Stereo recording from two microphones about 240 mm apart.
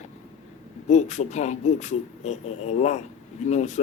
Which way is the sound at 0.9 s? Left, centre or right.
Left.